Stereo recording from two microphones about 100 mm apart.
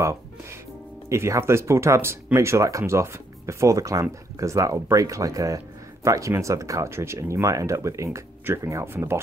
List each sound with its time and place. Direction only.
1.0 s speech: 30° right (ahead or behind)